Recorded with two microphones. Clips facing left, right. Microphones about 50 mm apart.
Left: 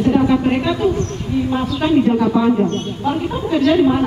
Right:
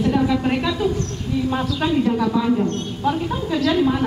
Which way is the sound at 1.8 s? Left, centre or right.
Left.